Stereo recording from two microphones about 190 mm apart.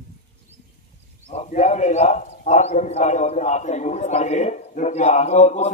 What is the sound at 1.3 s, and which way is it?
A man's voice, 35° left (ahead or behind).